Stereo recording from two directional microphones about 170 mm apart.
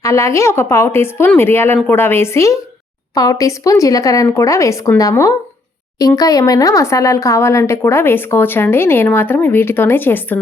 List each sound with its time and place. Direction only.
0.0 s speech: 15° left (ahead or behind)